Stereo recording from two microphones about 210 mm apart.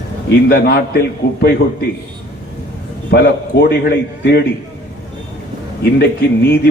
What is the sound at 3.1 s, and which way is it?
A man's voice, 50° left (ahead or behind).